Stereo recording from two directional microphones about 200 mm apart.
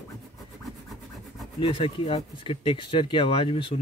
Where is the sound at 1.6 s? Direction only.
25° left (ahead or behind).